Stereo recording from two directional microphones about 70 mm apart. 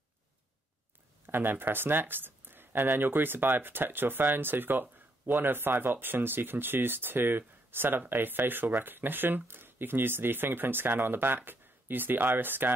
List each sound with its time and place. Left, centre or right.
1.2 s speech: right